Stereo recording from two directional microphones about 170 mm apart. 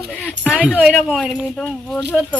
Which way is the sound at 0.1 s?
5° left (ahead or behind).